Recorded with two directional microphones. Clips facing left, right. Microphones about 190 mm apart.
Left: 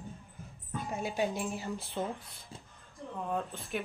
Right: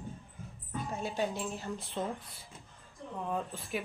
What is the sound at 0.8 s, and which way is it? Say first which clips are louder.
Speech: left 2 dB; 10° left (ahead or behind).